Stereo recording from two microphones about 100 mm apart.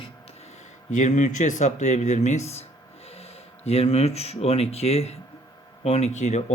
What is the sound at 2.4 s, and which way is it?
Speech, 90° left.